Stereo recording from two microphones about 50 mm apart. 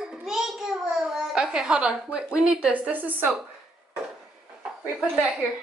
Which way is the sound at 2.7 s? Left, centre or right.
Right.